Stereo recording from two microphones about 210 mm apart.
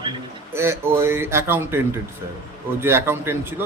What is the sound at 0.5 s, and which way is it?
Speech, 10° right (ahead or behind).